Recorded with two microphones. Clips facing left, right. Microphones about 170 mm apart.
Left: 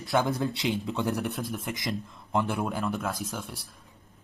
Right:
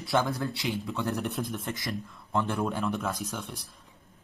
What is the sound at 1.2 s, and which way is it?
Speech, centre (ahead or behind).